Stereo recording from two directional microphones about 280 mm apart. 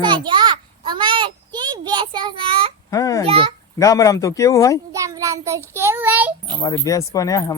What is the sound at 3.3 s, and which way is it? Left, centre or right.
Speech, centre.